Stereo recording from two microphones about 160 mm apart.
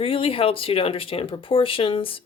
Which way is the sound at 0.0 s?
35° left (ahead or behind).